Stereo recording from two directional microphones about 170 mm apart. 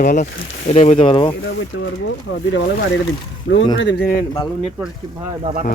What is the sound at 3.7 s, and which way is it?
Speech, 90° left.